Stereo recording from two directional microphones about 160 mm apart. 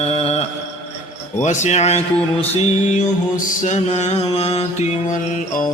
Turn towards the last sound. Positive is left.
turn(degrees=40)  # may be behind; listen again after turning